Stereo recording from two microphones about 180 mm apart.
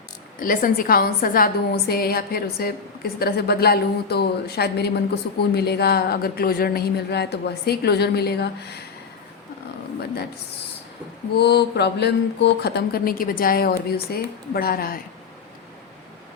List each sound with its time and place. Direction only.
0.3 s a woman's voice: 50° left (ahead or behind)
11.3 s a woman's voice: 65° left (ahead or behind)